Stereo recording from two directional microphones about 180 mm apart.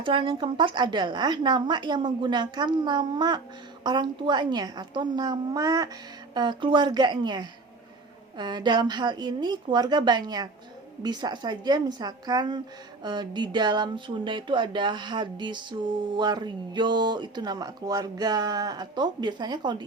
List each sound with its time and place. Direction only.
0.0 s speech: 25° right (ahead or behind)